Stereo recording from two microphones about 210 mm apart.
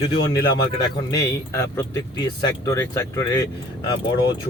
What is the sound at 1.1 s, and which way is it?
Speech, 15° left (ahead or behind).